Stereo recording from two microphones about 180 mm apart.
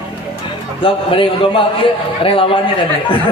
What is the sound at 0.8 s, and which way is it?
A man's voice, 30° left (ahead or behind).